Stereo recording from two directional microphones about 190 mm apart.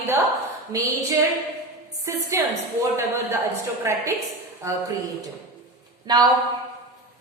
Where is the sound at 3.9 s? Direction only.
15° right (ahead or behind).